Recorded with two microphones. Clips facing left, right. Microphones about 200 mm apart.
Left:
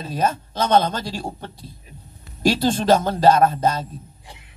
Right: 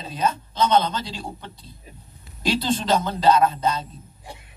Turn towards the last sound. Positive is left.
turn(degrees=50)  # may be behind; listen again after turning